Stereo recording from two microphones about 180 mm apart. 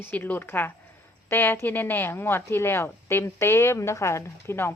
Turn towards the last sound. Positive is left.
turn(degrees=15)  # may be behind; listen again after turning